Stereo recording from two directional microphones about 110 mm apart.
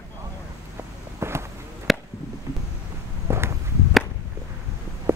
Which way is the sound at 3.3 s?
25° right (ahead or behind).